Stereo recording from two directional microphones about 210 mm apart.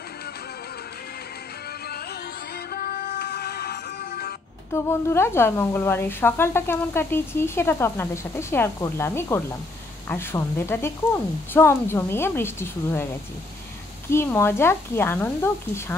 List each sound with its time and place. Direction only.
2.7 s music: 45° left (ahead or behind)
4.7 s speech: 10° left (ahead or behind)
14.1 s speech: 10° left (ahead or behind)